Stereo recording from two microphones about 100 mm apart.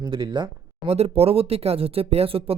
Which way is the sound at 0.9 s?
90° right.